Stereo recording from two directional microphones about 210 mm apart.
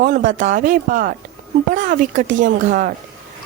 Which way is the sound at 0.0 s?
40° right (ahead or behind).